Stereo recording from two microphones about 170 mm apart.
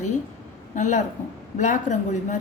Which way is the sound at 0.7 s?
45° left (ahead or behind).